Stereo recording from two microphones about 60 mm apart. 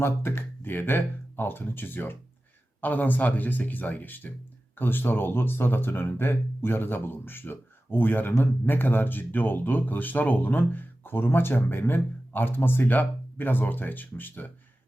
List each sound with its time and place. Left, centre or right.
0.0 s speech: left